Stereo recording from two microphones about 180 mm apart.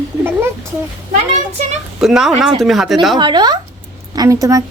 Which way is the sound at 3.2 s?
25° right (ahead or behind).